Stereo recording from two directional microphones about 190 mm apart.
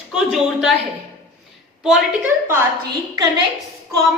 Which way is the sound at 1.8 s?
5° right (ahead or behind).